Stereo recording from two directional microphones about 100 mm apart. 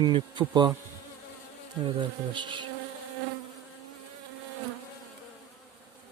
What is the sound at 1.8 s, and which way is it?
Speech, 50° right (ahead or behind).